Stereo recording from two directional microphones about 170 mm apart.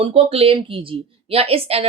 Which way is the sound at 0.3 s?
35° right (ahead or behind).